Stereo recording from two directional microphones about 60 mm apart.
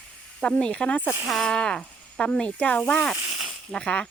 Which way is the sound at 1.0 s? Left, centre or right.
Right.